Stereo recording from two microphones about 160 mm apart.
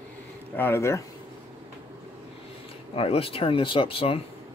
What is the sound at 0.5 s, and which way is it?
Speech, 15° left (ahead or behind).